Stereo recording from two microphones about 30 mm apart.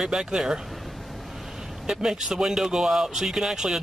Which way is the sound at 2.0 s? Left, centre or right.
Right.